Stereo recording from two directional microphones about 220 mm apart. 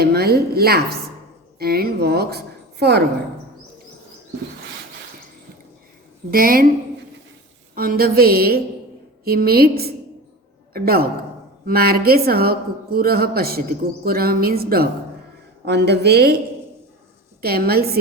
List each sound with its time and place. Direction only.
0.0 s a woman's voice: 45° right (ahead or behind)
6.3 s a woman's voice: 40° right (ahead or behind)
7.8 s a woman's voice: 40° right (ahead or behind)
17.4 s a woman's voice: 45° right (ahead or behind)